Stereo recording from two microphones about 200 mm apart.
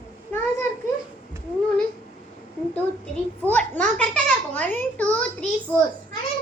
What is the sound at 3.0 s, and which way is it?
A child's voice, 5° left (ahead or behind).